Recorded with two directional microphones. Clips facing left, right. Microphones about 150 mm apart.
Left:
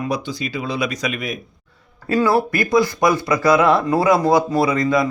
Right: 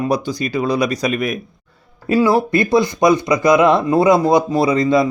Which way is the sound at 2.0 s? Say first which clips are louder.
Right 3 dB; 15° right (ahead or behind).